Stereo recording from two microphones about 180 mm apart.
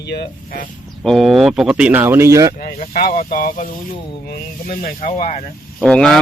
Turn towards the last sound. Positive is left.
turn(degrees=5)  # may be behind; listen again after turning